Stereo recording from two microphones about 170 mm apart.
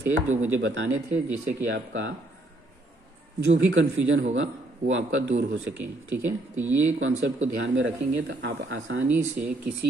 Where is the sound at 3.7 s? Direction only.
90° right.